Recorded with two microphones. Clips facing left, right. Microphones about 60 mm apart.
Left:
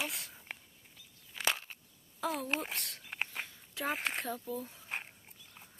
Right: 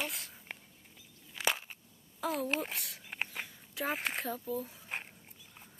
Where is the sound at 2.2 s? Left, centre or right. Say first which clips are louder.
Right 1 dB; centre.